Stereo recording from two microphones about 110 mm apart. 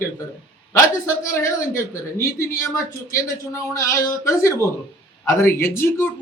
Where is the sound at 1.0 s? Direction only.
30° left (ahead or behind).